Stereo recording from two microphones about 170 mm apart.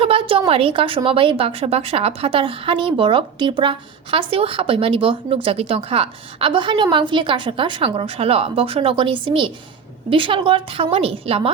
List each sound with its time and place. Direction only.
0.0 s a woman's voice: 30° right (ahead or behind)